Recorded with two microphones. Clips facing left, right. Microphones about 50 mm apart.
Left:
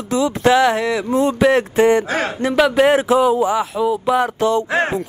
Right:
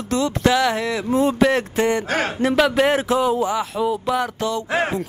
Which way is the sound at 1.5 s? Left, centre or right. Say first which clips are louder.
Left 5 dB; left.